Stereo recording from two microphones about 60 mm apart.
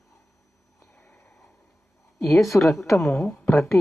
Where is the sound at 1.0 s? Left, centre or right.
Left.